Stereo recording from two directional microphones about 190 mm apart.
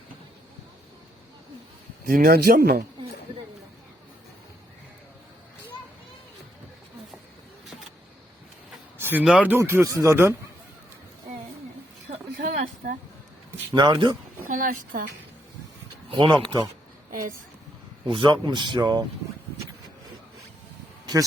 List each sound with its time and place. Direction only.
2.0 s speech: 50° right (ahead or behind)
9.0 s a man's voice: 10° right (ahead or behind)
12.0 s a sound: 40° right (ahead or behind)
13.7 s speech: 20° right (ahead or behind)
14.5 s speech: 45° right (ahead or behind)
16.0 s speech: 25° right (ahead or behind)
17.1 s a woman's voice: 45° right (ahead or behind)
18.0 s speech: 25° right (ahead or behind)